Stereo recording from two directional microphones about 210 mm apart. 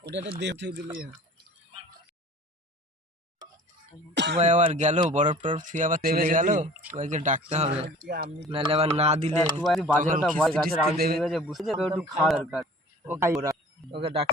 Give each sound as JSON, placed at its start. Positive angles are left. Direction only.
{"t": 0.3, "sound": "speech", "side_deg": -55}
{"t": 4.1, "sound": "speech", "side_deg": -55}
{"t": 4.4, "sound": "speech", "side_deg": -35}
{"t": 7.9, "sound": "speech", "side_deg": -40}
{"t": 8.4, "sound": "speech", "side_deg": -25}
{"t": 9.6, "sound": "speech", "side_deg": 0}
{"t": 10.9, "sound": "a man's voice", "side_deg": -45}
{"t": 11.2, "sound": "speech", "side_deg": 0}
{"t": 13.1, "sound": "speech", "side_deg": -10}